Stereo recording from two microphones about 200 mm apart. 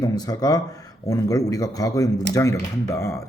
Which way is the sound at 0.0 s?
20° left (ahead or behind).